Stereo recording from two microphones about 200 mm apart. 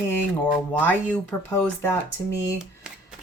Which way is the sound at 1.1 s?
10° left (ahead or behind).